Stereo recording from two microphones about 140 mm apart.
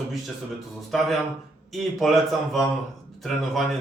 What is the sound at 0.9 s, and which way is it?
Speech, centre (ahead or behind).